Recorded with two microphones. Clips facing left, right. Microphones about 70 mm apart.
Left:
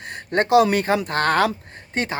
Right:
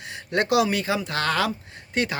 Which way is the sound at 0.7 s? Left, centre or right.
Left.